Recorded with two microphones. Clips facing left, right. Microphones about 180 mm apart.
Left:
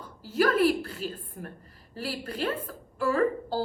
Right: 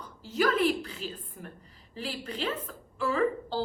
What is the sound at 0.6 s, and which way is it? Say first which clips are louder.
A woman's voice: left 3 dB; 45° left (ahead or behind).